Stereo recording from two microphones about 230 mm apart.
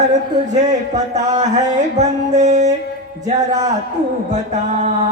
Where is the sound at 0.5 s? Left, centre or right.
Right.